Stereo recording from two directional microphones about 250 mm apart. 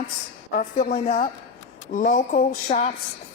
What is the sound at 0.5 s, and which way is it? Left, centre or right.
A woman's voice, left.